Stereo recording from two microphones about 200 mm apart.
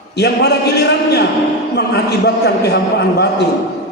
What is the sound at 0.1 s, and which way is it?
A man's voice, 55° left (ahead or behind).